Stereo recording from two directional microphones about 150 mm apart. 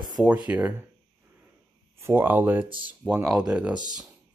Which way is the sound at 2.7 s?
35° right (ahead or behind).